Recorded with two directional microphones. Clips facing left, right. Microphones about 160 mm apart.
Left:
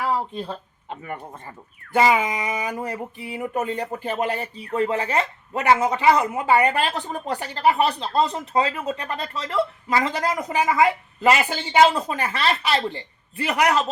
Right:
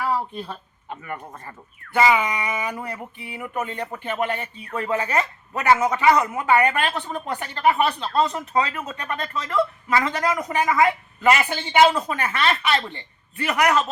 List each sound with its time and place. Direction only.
0.4 s speech: 25° left (ahead or behind)
1.9 s speech: 40° left (ahead or behind)